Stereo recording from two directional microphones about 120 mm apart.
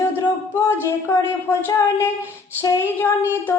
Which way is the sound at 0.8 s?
20° left (ahead or behind).